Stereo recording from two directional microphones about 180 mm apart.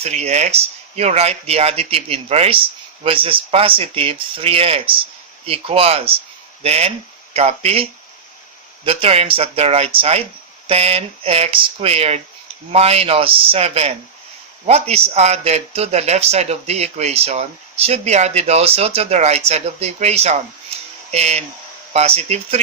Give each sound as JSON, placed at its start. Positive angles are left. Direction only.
{"t": 0.0, "sound": "a man's voice", "side_deg": -40}
{"t": 20.7, "sound": "a sound", "side_deg": -35}
{"t": 21.1, "sound": "a man's voice", "side_deg": -35}